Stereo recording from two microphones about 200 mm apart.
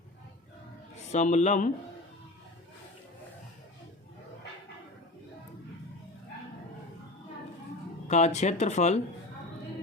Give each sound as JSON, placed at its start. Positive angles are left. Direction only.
{"t": 1.1, "sound": "speech", "side_deg": 35}
{"t": 8.0, "sound": "speech", "side_deg": 35}